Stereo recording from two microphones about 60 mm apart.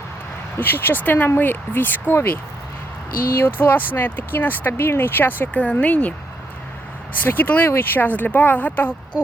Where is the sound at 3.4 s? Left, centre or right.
Left.